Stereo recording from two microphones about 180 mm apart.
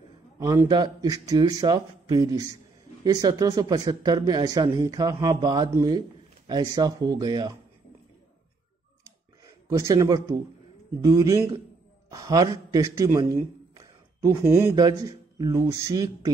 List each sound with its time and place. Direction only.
0.4 s a man's voice: 20° right (ahead or behind)
9.0 s a sound: 15° right (ahead or behind)
11.0 s a man's voice: 20° right (ahead or behind)